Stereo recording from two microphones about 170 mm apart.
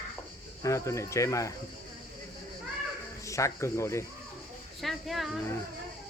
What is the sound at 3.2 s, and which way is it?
Speech, 20° left (ahead or behind).